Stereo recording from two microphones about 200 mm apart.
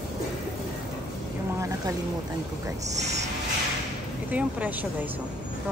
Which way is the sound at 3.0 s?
35° right (ahead or behind).